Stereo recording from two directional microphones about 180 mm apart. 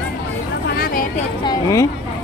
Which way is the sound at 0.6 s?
55° left (ahead or behind).